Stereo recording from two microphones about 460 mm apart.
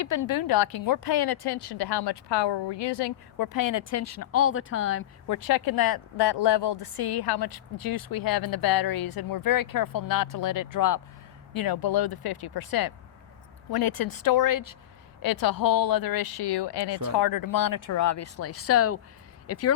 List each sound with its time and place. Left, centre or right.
0.0 s a woman's voice: left
5.3 s a woman's voice: left